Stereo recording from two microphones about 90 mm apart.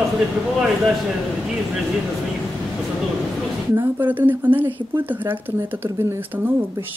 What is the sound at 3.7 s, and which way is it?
Speech, 25° right (ahead or behind).